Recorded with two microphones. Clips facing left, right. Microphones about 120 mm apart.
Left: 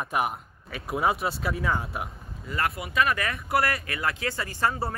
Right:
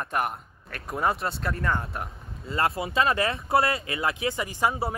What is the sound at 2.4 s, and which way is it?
Speech, 25° right (ahead or behind).